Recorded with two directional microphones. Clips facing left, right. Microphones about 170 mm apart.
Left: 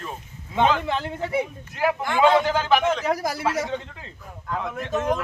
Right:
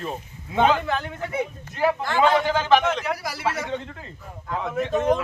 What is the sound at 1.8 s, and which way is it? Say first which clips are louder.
A man's voice: even; 15° left (ahead or behind).